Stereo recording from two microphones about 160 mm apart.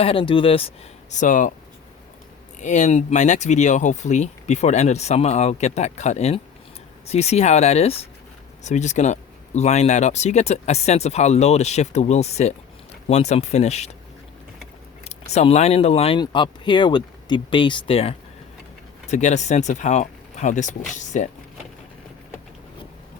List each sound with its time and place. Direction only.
0.0 s speech: 35° left (ahead or behind)
1.1 s speech: 55° left (ahead or behind)
2.6 s speech: 50° left (ahead or behind)
15.0 s speech: 45° left (ahead or behind)